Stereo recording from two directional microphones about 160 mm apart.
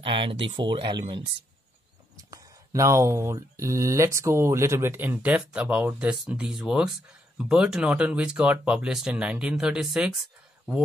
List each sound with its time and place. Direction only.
0.0 s speech: 35° right (ahead or behind)
2.3 s a sound: 20° right (ahead or behind)
3.3 s speech: 20° right (ahead or behind); by 10.2 s centre (ahead or behind)